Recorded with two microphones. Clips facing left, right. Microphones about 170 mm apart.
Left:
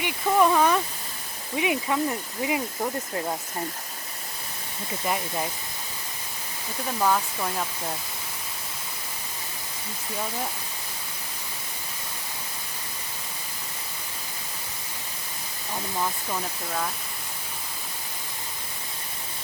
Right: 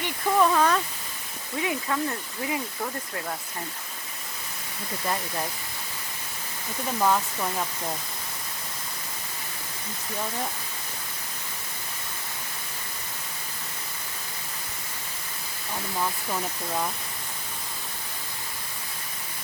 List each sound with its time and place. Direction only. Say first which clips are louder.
0.0 s speech: left 1 dB; 10° left (ahead or behind)
5.0 s speech: left 2 dB; 10° left (ahead or behind)
7.0 s speech: even; centre (ahead or behind)